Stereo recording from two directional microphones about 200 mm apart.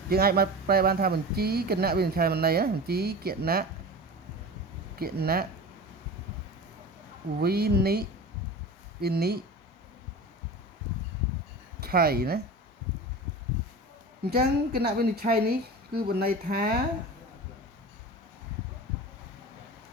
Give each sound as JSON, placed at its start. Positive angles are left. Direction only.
{"t": 0.1, "sound": "speech", "side_deg": -50}
{"t": 4.9, "sound": "speech", "side_deg": -50}
{"t": 7.4, "sound": "speech", "side_deg": -50}
{"t": 11.8, "sound": "speech", "side_deg": -50}
{"t": 14.3, "sound": "speech", "side_deg": -50}